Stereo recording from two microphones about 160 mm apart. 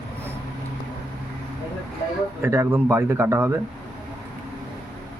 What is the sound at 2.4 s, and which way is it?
Speech, 15° right (ahead or behind).